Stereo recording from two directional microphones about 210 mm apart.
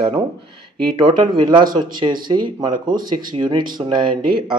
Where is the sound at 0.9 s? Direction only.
20° right (ahead or behind).